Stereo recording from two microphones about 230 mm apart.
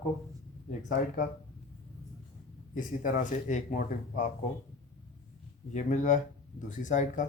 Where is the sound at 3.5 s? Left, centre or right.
Left.